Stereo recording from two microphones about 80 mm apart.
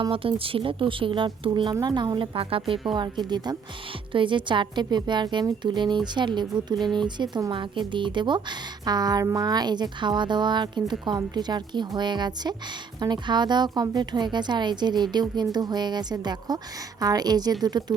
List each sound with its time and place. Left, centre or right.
0.1 s speech: right
1.8 s a woman's voice: right
2.9 s a woman's voice: right
4.1 s a woman's voice: right
7.5 s a woman's voice: right